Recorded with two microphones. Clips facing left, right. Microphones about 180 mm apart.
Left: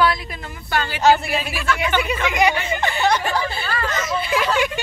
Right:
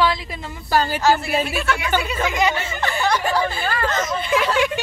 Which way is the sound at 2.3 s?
15° left (ahead or behind).